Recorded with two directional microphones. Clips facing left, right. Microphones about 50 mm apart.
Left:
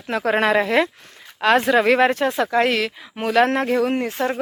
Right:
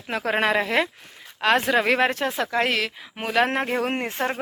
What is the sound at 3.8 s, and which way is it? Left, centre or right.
Speech, right.